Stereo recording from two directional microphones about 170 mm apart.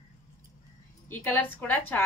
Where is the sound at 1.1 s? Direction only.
10° left (ahead or behind).